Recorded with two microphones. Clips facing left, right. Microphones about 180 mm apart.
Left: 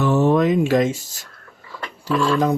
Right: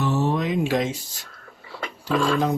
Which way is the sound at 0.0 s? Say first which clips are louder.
Left 7 dB; 50° left (ahead or behind).